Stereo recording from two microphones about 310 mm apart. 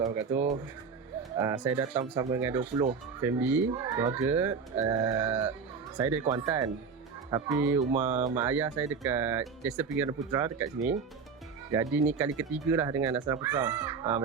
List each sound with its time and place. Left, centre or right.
0.0 s speech: centre
8.1 s speech: right
8.4 s speech: centre